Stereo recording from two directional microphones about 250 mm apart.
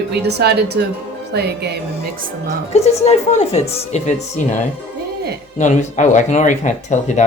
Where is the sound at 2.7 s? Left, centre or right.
Left.